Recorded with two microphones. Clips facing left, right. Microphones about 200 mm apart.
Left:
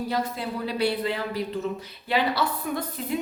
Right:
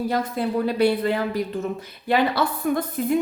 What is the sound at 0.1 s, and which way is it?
A woman's voice, 50° right (ahead or behind).